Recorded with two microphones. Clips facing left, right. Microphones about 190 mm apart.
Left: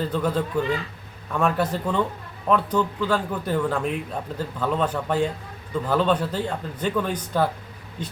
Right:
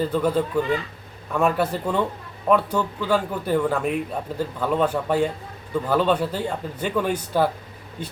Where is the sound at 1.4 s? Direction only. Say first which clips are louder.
Right 1 dB; 10° right (ahead or behind).